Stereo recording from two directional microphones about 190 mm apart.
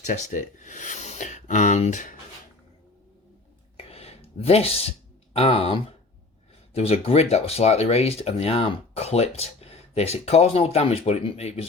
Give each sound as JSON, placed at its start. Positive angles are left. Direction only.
{"t": 0.0, "sound": "speech", "side_deg": 40}
{"t": 3.8, "sound": "a sound", "side_deg": 30}
{"t": 5.3, "sound": "speech", "side_deg": 30}